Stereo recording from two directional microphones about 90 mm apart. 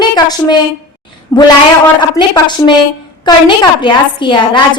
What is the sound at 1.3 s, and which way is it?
A woman's voice, 35° left (ahead or behind).